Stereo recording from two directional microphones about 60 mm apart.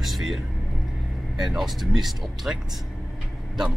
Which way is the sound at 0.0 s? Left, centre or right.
Centre.